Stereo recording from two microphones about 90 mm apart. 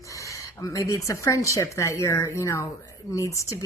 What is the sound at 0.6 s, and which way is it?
Speech, 40° left (ahead or behind).